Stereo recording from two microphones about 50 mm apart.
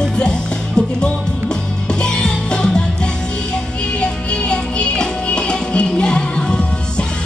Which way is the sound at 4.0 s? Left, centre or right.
Centre.